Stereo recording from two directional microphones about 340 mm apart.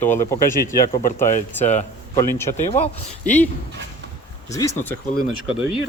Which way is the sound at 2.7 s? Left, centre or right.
Centre.